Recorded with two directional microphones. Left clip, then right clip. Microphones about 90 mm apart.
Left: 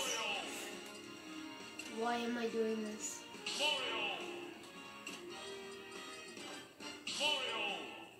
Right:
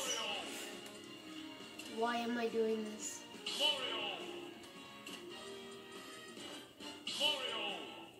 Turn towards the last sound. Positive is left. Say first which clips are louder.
# left 1 dB
turn(degrees=-25)  # may be behind; listen again after turning